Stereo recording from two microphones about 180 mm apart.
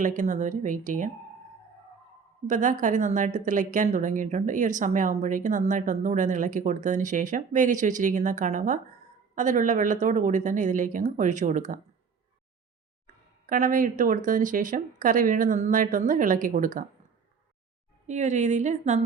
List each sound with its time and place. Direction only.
0.0 s a woman's voice: 45° right (ahead or behind)
2.5 s a woman's voice: 45° right (ahead or behind)
13.5 s a woman's voice: 50° right (ahead or behind)
18.0 s a woman's voice: 40° right (ahead or behind)